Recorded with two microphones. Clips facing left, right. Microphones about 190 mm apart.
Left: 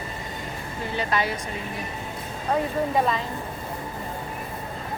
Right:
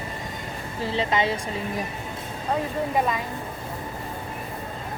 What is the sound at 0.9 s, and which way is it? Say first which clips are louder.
Speech: right 2 dB; 25° right (ahead or behind).